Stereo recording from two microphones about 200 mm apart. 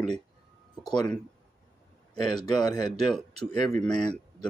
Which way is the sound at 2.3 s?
20° left (ahead or behind).